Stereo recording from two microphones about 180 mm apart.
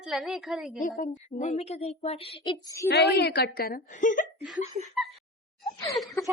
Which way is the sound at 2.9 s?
65° left (ahead or behind).